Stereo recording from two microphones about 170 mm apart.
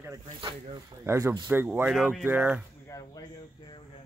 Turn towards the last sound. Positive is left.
turn(degrees=20)  # may be behind; listen again after turning